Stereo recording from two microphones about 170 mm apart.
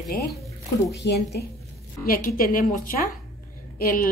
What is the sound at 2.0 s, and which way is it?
A woman's voice, 55° left (ahead or behind).